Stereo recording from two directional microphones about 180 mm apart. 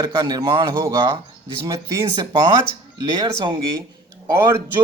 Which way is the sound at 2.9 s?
25° right (ahead or behind).